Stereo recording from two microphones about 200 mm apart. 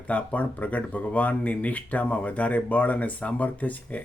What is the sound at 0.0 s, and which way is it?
Speech, 5° left (ahead or behind).